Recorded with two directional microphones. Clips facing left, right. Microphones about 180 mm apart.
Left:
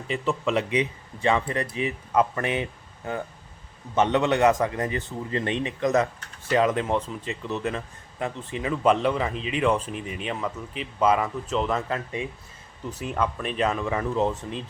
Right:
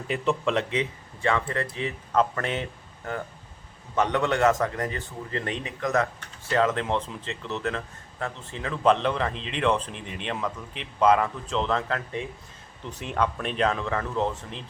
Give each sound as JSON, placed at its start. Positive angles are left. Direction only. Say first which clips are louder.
{"t": 0.1, "sound": "speech", "louder": "even", "side_deg": 5}